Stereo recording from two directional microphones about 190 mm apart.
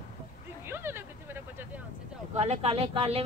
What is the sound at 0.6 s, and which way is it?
Vehicle, 10° right (ahead or behind).